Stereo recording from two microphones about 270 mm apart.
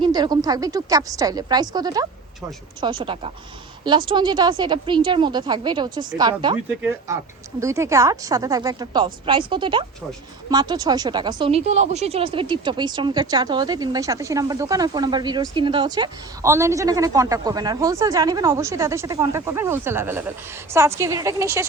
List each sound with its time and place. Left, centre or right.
0.0 s speech: centre